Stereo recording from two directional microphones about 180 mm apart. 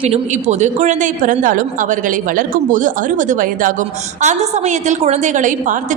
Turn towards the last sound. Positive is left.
turn(degrees=-45)  # may be behind; listen again after turning